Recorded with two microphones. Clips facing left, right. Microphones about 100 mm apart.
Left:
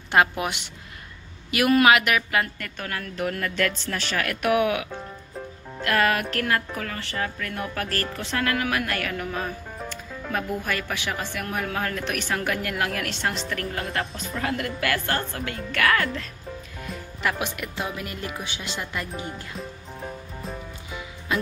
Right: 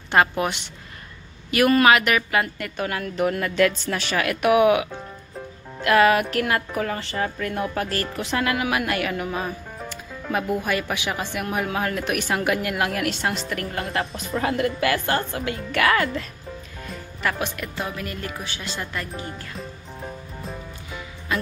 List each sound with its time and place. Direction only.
0.1 s a woman's voice: 5° left (ahead or behind)
14.3 s a woman's voice: 25° right (ahead or behind)
17.2 s speech: 10° left (ahead or behind)
19.5 s music: centre (ahead or behind)